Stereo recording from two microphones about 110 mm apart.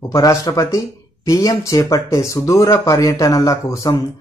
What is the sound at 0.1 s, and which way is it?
Speech, 30° left (ahead or behind).